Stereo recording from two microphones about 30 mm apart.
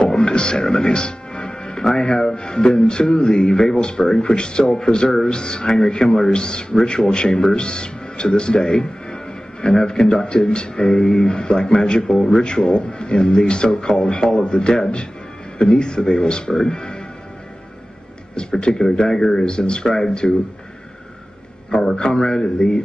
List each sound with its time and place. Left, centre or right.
0.0 s music: left
2.0 s a man's voice: left
2.3 s speech: left
3.5 s a man's voice: left
6.0 s speech: centre
6.3 s a man's voice: left
14.4 s speech: left
15.7 s speech: left
18.3 s speech: left
19.4 s speech: left
20.2 s speech: centre
21.9 s a man's voice: left